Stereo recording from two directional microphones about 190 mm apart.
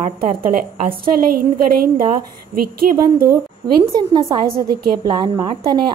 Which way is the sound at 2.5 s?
50° right (ahead or behind).